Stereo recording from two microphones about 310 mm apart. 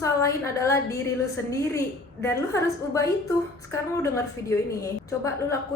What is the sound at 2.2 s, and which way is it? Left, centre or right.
A woman's voice, centre.